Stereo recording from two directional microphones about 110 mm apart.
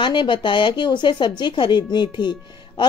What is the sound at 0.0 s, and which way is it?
Speech, 45° left (ahead or behind).